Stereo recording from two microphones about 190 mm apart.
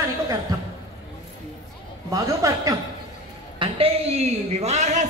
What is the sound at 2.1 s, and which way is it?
Speech, 20° right (ahead or behind).